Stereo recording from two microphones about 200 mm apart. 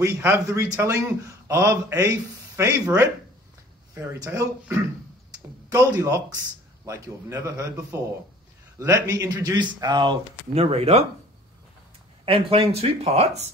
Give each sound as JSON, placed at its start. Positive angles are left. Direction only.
{"t": 0.0, "sound": "speech", "side_deg": -15}
{"t": 12.3, "sound": "speech", "side_deg": -30}